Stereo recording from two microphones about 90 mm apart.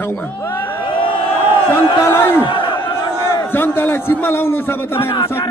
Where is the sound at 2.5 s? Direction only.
60° left (ahead or behind).